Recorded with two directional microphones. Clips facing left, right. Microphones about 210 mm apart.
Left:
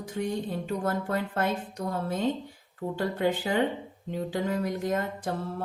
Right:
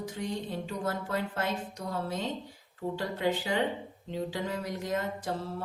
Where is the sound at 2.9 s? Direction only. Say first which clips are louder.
Left 4 dB; 50° left (ahead or behind).